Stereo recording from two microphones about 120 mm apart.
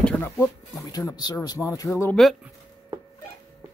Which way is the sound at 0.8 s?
30° left (ahead or behind).